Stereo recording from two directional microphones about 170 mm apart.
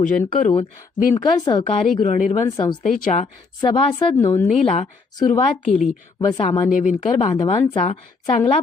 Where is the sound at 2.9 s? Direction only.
50° left (ahead or behind).